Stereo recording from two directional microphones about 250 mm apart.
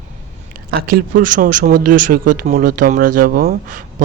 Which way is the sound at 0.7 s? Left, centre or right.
Right.